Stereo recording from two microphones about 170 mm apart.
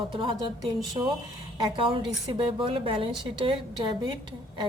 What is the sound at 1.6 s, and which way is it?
A woman's voice, 30° right (ahead or behind).